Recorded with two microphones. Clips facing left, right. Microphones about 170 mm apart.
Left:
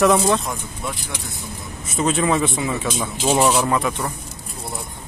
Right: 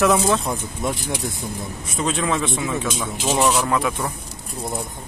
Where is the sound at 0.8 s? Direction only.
45° right (ahead or behind).